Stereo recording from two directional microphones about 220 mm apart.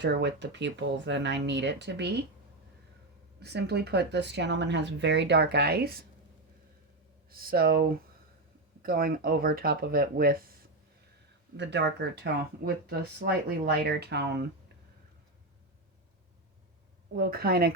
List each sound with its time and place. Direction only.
0.0 s speech: 50° right (ahead or behind)
3.4 s speech: 50° right (ahead or behind)
7.3 s speech: 40° right (ahead or behind)
11.5 s speech: 50° right (ahead or behind)
17.2 s speech: 45° right (ahead or behind)